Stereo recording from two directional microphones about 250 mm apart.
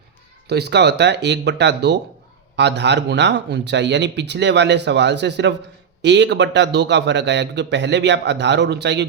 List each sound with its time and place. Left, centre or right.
0.4 s a man's voice: right